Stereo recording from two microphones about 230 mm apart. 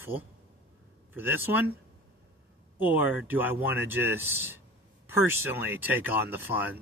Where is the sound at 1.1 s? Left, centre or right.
Centre.